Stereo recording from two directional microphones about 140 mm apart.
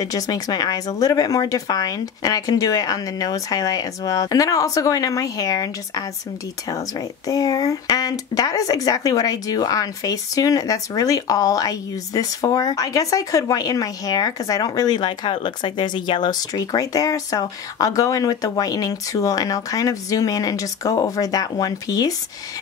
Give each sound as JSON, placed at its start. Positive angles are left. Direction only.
{"t": 0.0, "sound": "speech", "side_deg": 25}